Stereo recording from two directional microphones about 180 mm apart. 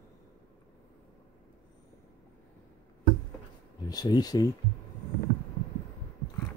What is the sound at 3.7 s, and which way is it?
Speech, 20° left (ahead or behind).